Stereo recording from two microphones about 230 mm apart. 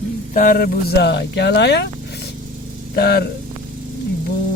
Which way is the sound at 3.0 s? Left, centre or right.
Left.